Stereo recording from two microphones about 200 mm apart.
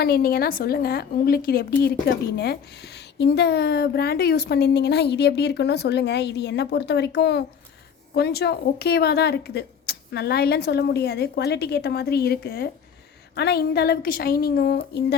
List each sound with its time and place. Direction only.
0.0 s a woman's voice: 50° left (ahead or behind)